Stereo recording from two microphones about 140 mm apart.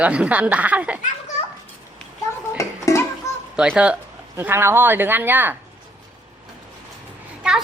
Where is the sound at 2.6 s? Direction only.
20° left (ahead or behind).